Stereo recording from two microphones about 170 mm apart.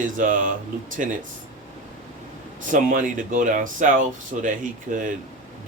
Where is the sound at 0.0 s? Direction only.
50° right (ahead or behind).